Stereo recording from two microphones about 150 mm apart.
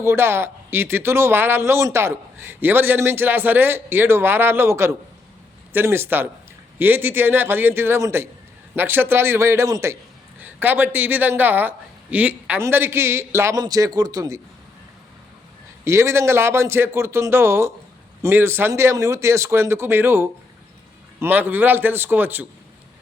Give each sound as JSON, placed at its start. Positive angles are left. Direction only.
{"t": 0.0, "sound": "a man's voice", "side_deg": -15}
{"t": 15.8, "sound": "a man's voice", "side_deg": -20}